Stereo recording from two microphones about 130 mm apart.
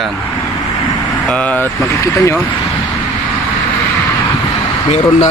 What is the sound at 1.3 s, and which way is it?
Speech, 10° left (ahead or behind).